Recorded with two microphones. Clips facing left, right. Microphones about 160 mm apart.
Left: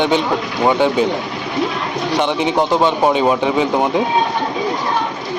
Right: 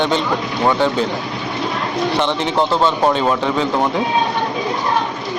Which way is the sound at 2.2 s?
10° left (ahead or behind).